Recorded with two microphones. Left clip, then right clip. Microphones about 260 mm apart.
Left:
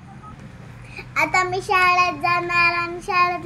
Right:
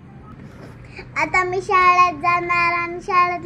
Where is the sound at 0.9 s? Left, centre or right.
Left.